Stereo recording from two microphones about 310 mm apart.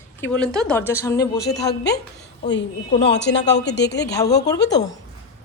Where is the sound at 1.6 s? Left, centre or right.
Left.